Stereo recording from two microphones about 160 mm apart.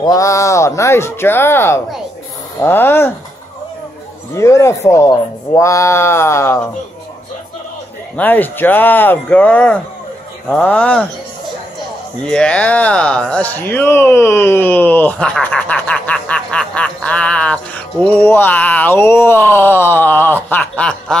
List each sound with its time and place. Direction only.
0.0 s speech: 20° left (ahead or behind)
4.4 s speech: 20° left (ahead or behind)
8.2 s speech: 10° left (ahead or behind)
12.2 s speech: 5° left (ahead or behind)